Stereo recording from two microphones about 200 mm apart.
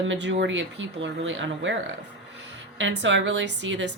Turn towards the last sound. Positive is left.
turn(degrees=-65)  # may be behind; listen again after turning